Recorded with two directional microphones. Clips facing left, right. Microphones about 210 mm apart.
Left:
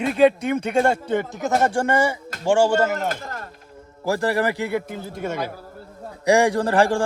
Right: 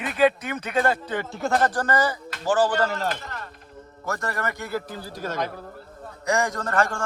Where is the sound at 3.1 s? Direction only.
45° left (ahead or behind).